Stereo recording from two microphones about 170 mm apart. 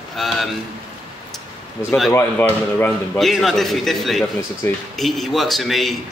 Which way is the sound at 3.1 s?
Centre (ahead or behind).